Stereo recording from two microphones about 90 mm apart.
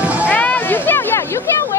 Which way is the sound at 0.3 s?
20° left (ahead or behind).